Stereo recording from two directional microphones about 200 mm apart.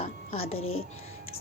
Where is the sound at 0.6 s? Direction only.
90° left.